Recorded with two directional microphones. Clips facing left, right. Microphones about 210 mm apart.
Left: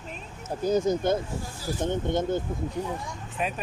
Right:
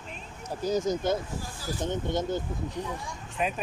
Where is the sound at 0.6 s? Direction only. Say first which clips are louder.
Left 3 dB; 55° left (ahead or behind).